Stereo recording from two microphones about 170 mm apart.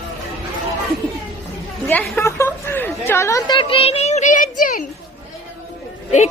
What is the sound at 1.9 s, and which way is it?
Chatter, 15° left (ahead or behind).